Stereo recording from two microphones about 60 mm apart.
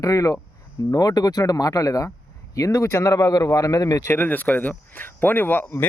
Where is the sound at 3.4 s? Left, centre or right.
Left.